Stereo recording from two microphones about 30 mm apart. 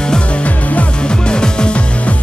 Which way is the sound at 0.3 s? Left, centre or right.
Left.